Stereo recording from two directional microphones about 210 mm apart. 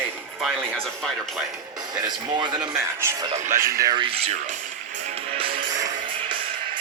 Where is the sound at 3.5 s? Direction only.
15° right (ahead or behind).